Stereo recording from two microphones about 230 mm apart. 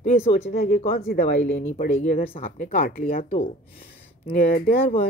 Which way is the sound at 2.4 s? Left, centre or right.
Left.